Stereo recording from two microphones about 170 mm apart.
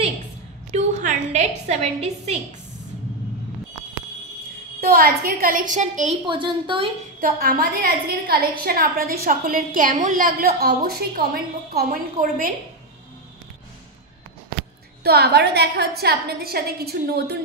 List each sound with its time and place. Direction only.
0.7 s a woman's voice: 40° right (ahead or behind)
4.7 s a woman's voice: 65° right (ahead or behind); by 6.1 s 45° right (ahead or behind)
6.2 s a woman's voice: 30° right (ahead or behind)
7.2 s a woman's voice: 60° right (ahead or behind)
15.0 s a woman's voice: 70° right (ahead or behind)